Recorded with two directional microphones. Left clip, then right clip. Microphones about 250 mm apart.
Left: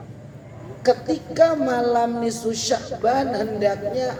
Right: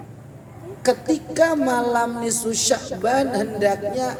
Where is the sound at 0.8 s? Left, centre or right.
Right.